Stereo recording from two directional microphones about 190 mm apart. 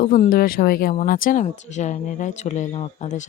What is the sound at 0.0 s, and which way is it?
Speech, 45° left (ahead or behind).